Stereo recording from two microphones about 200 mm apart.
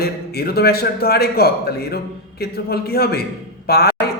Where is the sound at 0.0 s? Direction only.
50° left (ahead or behind).